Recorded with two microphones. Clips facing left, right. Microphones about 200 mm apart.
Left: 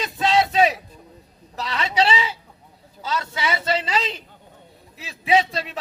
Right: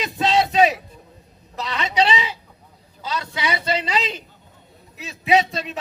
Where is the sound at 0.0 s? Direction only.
20° right (ahead or behind).